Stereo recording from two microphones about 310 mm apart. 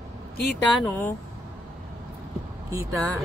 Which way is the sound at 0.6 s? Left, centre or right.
Centre.